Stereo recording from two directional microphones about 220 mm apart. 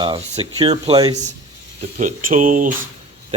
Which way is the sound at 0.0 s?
20° right (ahead or behind).